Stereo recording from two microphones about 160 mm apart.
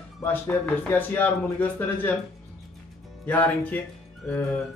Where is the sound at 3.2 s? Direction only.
10° left (ahead or behind).